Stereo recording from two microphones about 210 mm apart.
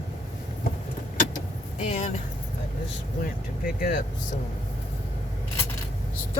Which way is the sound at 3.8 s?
40° left (ahead or behind).